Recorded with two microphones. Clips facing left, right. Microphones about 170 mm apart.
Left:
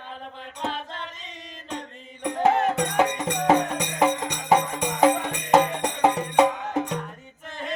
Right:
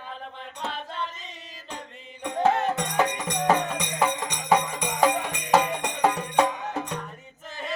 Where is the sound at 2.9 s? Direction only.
15° left (ahead or behind).